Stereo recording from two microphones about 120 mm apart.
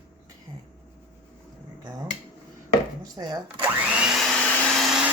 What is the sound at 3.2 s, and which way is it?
Blender, 45° right (ahead or behind).